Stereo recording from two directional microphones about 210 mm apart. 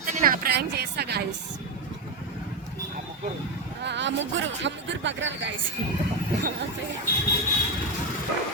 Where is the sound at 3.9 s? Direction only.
55° right (ahead or behind).